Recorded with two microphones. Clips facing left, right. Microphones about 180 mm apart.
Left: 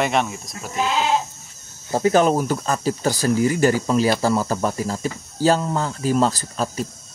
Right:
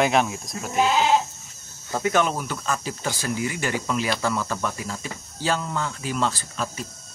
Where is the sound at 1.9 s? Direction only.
30° left (ahead or behind).